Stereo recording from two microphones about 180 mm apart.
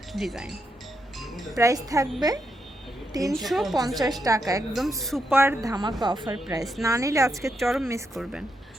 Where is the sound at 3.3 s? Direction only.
Centre (ahead or behind).